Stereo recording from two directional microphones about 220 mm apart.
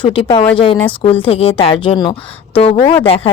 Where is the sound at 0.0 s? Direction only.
25° left (ahead or behind).